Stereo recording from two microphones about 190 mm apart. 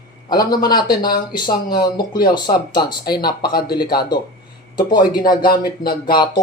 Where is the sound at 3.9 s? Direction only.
20° left (ahead or behind).